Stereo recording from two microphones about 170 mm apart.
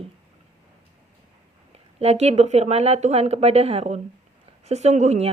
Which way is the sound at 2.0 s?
40° right (ahead or behind).